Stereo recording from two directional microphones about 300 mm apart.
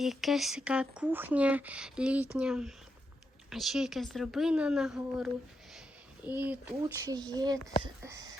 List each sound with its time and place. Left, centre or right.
0.0 s a child's voice: centre